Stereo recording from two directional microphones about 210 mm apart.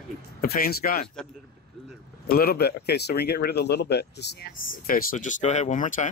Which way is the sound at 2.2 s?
45° left (ahead or behind).